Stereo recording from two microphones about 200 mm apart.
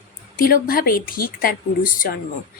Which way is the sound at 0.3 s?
45° left (ahead or behind).